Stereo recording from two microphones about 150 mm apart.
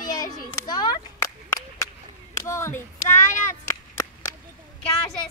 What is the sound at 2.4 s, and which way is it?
Child singing, 20° left (ahead or behind).